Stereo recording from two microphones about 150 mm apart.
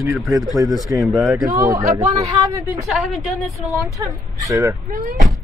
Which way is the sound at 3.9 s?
25° right (ahead or behind).